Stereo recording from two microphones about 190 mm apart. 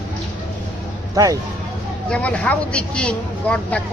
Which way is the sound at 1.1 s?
20° right (ahead or behind).